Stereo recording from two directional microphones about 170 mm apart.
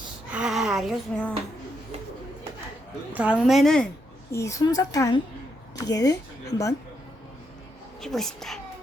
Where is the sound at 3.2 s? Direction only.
5° right (ahead or behind).